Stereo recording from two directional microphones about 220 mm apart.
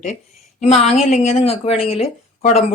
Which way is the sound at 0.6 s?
30° left (ahead or behind).